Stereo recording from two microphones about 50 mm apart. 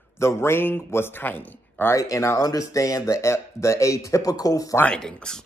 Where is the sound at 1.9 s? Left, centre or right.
Left.